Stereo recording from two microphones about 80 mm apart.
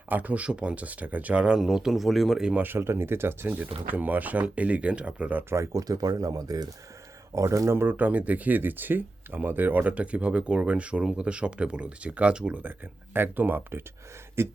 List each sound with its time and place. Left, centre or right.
0.1 s speech: right; by 2.5 s centre
2.6 s speech: right
5.5 s speech: right
7.8 s speech: right